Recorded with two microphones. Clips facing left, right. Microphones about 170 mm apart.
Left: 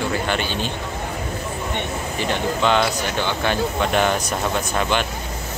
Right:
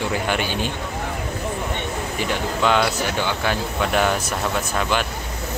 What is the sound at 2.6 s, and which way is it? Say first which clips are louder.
Speech: right 1 dB; 5° right (ahead or behind).